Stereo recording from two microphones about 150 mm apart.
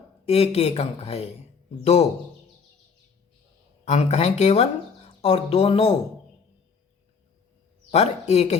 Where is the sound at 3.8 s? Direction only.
45° left (ahead or behind).